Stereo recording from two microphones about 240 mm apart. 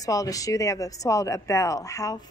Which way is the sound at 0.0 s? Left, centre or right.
Centre.